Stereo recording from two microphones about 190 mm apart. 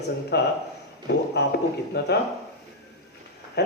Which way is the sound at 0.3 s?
60° left (ahead or behind).